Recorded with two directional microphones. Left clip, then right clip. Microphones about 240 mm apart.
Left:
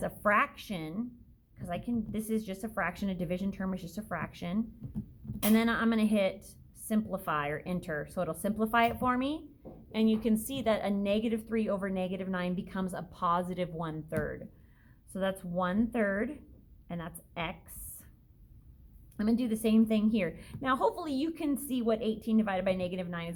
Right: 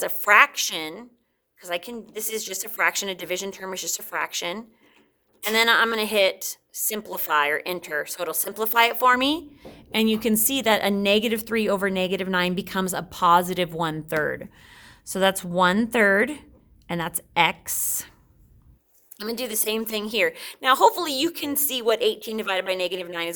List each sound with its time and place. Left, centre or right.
0.0 s a woman's voice: right
19.1 s a woman's voice: right